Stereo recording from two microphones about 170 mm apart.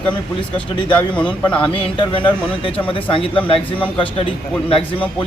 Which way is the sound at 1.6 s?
35° left (ahead or behind).